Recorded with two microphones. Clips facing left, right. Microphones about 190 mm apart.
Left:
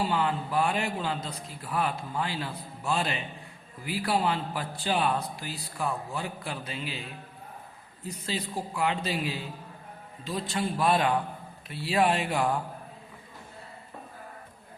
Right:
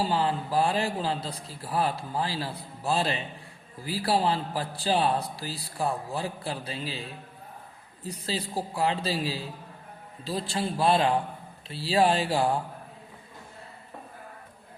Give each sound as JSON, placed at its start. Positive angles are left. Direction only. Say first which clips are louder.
{"t": 0.0, "sound": "a man's voice", "louder": "right 1 dB", "side_deg": -35}